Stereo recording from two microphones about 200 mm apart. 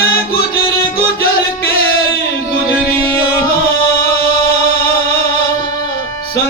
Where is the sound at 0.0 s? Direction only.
50° left (ahead or behind).